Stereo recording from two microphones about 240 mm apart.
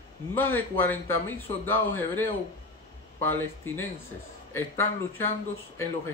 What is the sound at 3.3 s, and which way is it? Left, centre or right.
Speech, centre.